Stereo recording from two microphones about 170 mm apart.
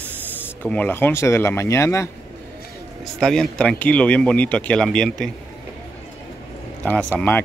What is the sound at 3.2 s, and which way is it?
Speech, 5° left (ahead or behind).